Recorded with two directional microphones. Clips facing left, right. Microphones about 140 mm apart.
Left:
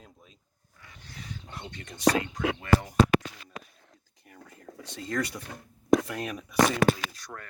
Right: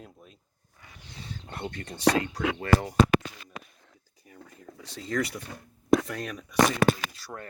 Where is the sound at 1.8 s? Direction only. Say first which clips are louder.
Even; 35° right (ahead or behind).